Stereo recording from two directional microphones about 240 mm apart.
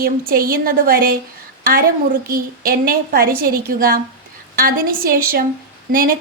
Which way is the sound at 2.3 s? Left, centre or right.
Right.